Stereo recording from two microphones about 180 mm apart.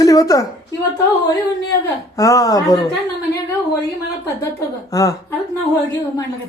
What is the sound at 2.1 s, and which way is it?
Speech, 20° left (ahead or behind).